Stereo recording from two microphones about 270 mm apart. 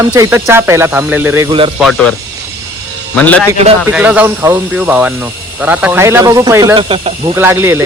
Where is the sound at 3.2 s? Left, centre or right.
Centre.